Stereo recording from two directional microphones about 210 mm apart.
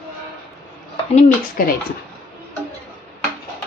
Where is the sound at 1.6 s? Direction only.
40° left (ahead or behind).